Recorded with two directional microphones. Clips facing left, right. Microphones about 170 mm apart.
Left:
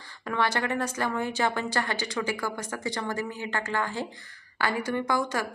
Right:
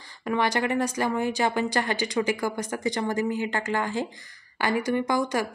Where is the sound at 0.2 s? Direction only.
15° right (ahead or behind).